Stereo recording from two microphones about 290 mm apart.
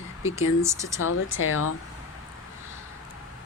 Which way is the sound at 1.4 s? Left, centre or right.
Left.